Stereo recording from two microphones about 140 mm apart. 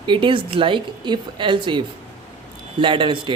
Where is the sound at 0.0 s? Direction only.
35° right (ahead or behind).